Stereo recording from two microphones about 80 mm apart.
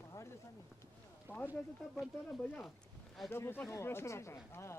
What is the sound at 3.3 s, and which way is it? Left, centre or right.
Speech, left.